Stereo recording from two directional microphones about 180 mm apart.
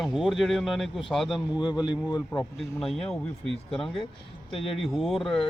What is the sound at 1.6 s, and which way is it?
Speech, 25° left (ahead or behind).